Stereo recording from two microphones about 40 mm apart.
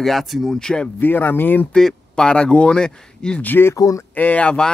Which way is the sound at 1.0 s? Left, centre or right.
Left.